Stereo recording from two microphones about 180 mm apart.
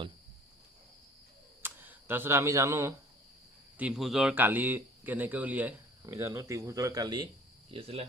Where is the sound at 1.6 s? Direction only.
10° right (ahead or behind).